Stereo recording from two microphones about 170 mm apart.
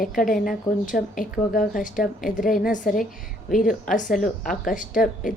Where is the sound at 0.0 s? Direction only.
55° left (ahead or behind).